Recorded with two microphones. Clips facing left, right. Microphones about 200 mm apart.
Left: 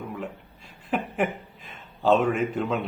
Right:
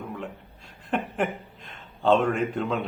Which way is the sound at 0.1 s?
5° left (ahead or behind).